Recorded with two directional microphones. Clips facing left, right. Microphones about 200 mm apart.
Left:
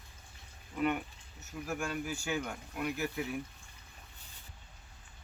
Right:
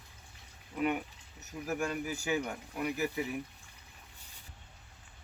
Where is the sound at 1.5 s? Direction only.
15° right (ahead or behind).